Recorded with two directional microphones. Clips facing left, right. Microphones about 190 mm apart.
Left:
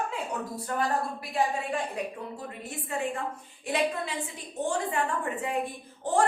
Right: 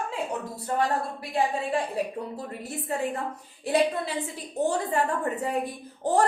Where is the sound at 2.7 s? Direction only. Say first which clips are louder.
Right 2 dB; 40° right (ahead or behind).